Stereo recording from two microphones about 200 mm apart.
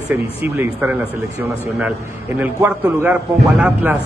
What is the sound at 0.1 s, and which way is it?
Speech, 10° right (ahead or behind).